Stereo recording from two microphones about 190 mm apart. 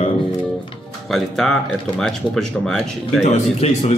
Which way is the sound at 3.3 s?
35° left (ahead or behind).